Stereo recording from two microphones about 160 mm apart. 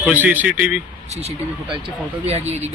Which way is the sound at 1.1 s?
40° right (ahead or behind).